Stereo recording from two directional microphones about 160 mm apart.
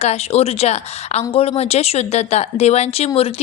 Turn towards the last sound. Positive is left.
turn(degrees=40)  # may be behind; listen again after turning